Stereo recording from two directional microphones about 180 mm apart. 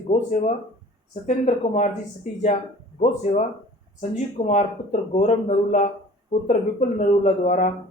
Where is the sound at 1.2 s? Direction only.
40° left (ahead or behind).